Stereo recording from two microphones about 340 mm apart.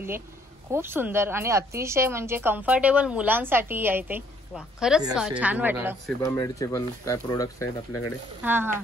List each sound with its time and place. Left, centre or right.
0.7 s speech: centre
6.2 s speech: centre
8.4 s speech: centre